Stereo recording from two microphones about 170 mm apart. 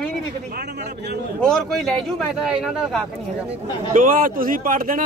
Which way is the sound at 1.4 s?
5° left (ahead or behind).